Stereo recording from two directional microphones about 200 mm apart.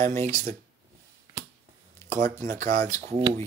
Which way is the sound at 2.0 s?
10° left (ahead or behind).